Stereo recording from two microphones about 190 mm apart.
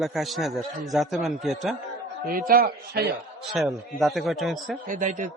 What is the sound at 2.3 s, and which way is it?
Speech, 50° right (ahead or behind).